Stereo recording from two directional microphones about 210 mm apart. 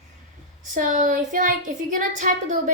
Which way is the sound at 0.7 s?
35° right (ahead or behind).